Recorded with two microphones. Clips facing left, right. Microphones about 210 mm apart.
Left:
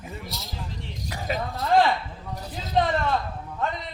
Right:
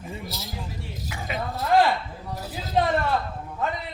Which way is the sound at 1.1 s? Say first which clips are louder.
Left 3 dB; 40° left (ahead or behind).